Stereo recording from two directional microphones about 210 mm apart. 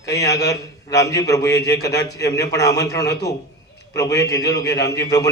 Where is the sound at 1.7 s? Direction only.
50° left (ahead or behind).